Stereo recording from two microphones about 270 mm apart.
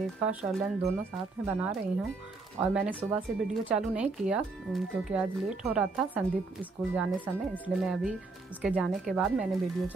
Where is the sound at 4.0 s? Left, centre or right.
Centre.